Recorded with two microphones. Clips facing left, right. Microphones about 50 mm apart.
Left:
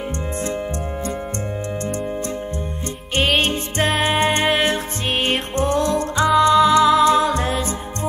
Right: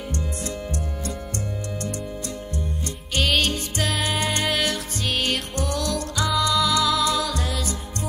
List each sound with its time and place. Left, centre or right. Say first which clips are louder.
3.2 s music: left 4 dB; left